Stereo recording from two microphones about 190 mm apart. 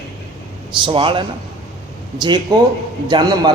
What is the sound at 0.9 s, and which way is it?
Speech, 25° right (ahead or behind).